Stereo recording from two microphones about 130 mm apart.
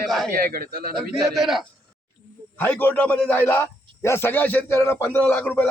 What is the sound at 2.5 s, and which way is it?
A man's voice, 15° left (ahead or behind).